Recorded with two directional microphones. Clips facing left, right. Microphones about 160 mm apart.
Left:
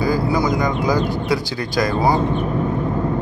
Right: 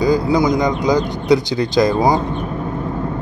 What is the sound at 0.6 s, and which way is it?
Speech, 20° right (ahead or behind).